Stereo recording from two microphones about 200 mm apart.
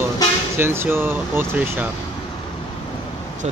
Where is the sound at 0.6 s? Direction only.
10° right (ahead or behind).